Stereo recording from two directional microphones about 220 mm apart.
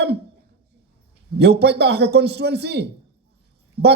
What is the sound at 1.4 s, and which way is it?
A man's voice, 50° right (ahead or behind).